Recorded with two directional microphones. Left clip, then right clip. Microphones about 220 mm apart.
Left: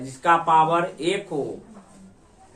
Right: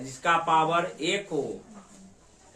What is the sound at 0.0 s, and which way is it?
Speech, 15° left (ahead or behind).